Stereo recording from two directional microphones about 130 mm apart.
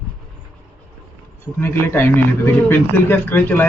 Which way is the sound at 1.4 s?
15° left (ahead or behind).